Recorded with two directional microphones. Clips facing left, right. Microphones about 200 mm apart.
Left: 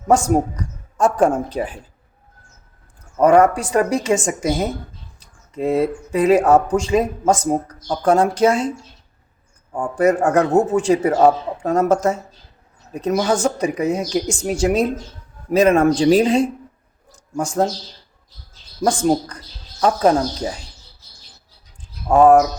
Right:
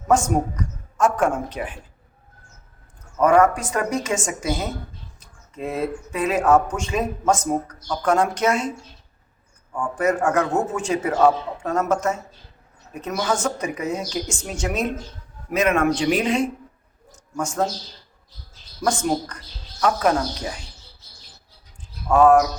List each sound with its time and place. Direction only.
0.1 s a man's voice: 35° left (ahead or behind)
3.2 s a man's voice: 35° left (ahead or behind)
9.7 s a man's voice: 35° left (ahead or behind)
18.8 s a man's voice: 35° left (ahead or behind)
22.1 s a man's voice: 30° left (ahead or behind)